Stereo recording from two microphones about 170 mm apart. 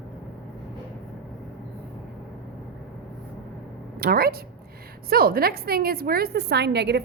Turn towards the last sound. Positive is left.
turn(degrees=-80)